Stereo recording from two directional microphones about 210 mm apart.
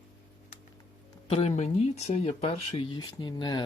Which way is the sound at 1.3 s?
30° left (ahead or behind).